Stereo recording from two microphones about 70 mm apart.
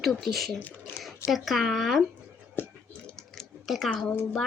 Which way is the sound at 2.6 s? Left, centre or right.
Left.